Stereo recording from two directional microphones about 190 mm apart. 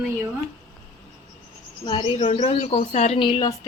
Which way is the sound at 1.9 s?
25° left (ahead or behind).